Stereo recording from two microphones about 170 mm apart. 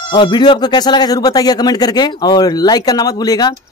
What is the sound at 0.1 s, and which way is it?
Speech, 25° left (ahead or behind).